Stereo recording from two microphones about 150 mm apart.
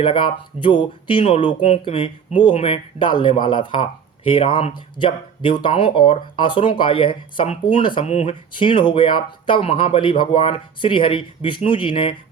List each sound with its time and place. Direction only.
0.0 s speech: 35° left (ahead or behind)
8.0 s speech: 50° left (ahead or behind)
8.5 s speech: 35° left (ahead or behind)